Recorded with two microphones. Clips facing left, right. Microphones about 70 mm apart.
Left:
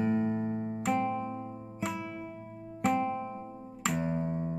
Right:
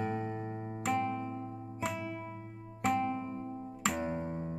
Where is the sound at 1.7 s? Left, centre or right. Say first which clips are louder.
Left 1 dB; centre.